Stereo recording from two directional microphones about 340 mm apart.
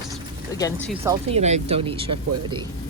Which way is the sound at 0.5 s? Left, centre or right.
Centre.